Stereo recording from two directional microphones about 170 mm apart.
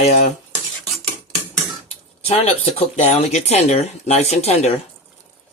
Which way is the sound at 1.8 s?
35° left (ahead or behind).